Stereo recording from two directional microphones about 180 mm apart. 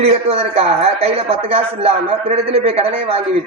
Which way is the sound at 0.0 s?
35° right (ahead or behind).